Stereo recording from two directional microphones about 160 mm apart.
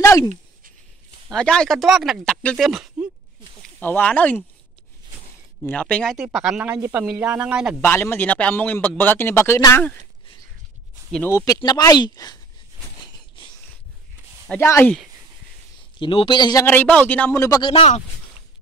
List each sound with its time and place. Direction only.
0.0 s a sound: 20° left (ahead or behind)
1.3 s speech: 5° left (ahead or behind)
3.8 s a man's voice: 10° left (ahead or behind)
5.6 s a man's voice: 10° left (ahead or behind)
6.1 s speech: 5° right (ahead or behind)
7.8 s a man's voice: 15° left (ahead or behind)
11.2 s speech: 20° left (ahead or behind)
13.0 s a sound: 25° left (ahead or behind)
14.5 s a man's voice: 15° left (ahead or behind)
16.0 s a man's voice: 30° left (ahead or behind)
16.6 s a man's voice: 10° left (ahead or behind)
17.6 s a man's voice: 35° left (ahead or behind)